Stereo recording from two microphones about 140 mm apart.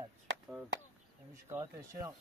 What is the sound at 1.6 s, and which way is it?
Speech, 25° right (ahead or behind).